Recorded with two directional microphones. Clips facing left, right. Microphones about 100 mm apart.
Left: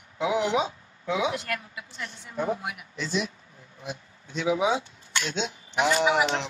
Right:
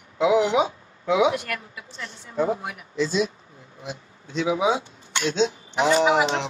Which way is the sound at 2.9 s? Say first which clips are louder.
Right 7 dB; 90° right.